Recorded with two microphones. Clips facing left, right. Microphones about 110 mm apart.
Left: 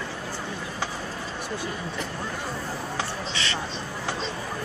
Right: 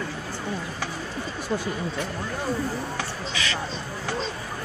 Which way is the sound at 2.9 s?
25° left (ahead or behind).